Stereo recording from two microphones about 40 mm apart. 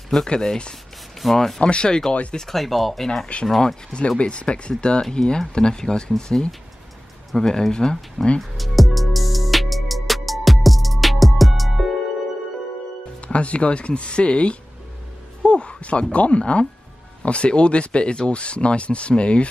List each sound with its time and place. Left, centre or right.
0.1 s speech: centre
1.1 s speech: centre
1.6 s speech: left
2.3 s speech: centre
3.3 s speech: left
8.4 s music: centre
13.3 s speech: left